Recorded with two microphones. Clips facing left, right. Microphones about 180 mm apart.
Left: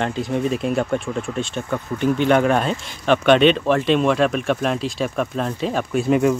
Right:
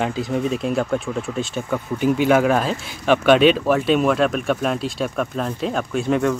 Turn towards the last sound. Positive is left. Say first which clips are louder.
# left 2 dB
turn(degrees=5)  # may be behind; listen again after turning